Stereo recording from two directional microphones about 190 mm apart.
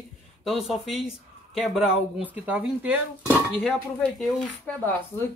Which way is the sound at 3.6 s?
5° left (ahead or behind).